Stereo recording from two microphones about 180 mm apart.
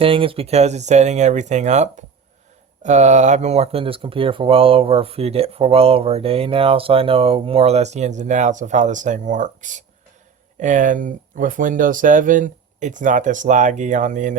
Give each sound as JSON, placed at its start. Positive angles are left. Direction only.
{"t": 0.0, "sound": "speech", "side_deg": -30}